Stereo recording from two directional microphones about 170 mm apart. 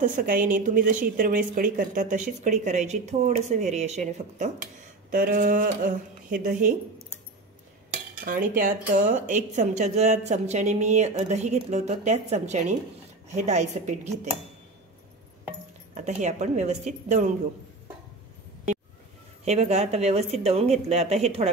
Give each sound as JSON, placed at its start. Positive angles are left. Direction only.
{"t": 0.0, "sound": "speech", "side_deg": -50}
{"t": 5.1, "sound": "speech", "side_deg": -55}
{"t": 8.2, "sound": "a woman's voice", "side_deg": -55}
{"t": 15.9, "sound": "speech", "side_deg": -45}
{"t": 19.4, "sound": "a woman's voice", "side_deg": -40}